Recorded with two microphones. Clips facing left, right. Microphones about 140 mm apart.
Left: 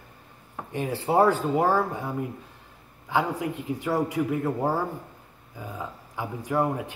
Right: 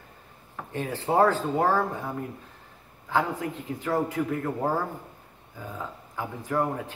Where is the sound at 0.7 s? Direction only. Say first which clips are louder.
Left 1 dB; 10° left (ahead or behind).